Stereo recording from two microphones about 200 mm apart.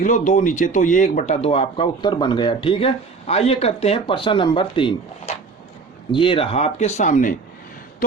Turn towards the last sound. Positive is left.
turn(degrees=40)  # may be behind; listen again after turning